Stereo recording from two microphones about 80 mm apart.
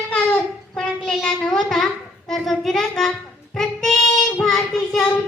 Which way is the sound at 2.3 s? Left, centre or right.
Centre.